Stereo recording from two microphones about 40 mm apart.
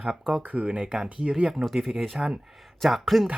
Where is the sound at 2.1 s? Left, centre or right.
Right.